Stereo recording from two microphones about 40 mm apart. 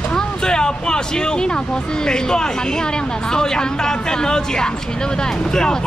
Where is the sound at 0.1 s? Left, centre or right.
Centre.